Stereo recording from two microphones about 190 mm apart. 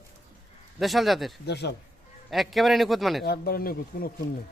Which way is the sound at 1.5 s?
60° left (ahead or behind).